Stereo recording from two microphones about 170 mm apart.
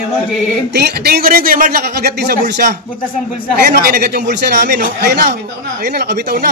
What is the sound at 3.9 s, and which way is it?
Speech, 80° right.